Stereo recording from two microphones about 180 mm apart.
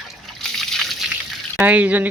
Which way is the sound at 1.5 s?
10° right (ahead or behind).